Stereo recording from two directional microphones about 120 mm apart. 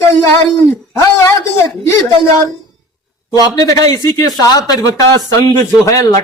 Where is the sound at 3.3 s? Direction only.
30° left (ahead or behind).